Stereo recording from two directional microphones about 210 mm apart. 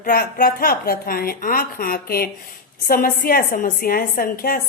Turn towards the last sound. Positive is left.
turn(degrees=45)  # may be behind; listen again after turning